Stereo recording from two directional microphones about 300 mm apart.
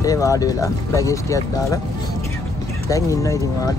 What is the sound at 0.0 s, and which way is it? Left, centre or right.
Speech, centre.